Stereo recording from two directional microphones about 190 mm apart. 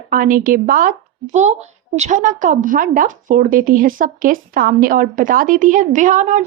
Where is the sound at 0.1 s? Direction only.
45° right (ahead or behind).